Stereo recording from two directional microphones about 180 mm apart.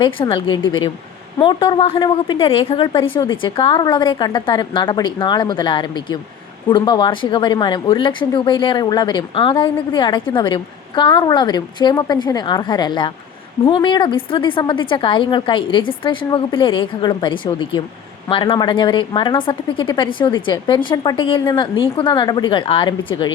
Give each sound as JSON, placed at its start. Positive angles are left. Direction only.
{"t": 0.0, "sound": "speech", "side_deg": 30}